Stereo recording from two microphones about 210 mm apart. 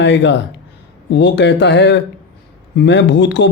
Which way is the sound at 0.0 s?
60° left (ahead or behind).